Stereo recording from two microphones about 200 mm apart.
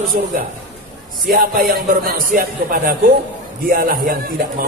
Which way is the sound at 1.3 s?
45° right (ahead or behind).